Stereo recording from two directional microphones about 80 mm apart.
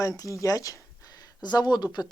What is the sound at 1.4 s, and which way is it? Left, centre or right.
Speech, left.